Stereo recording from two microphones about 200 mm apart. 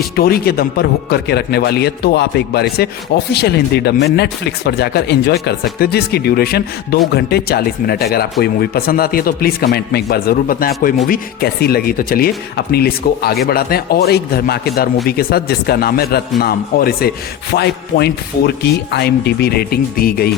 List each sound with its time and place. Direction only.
0.2 s a man's voice: 50° left (ahead or behind)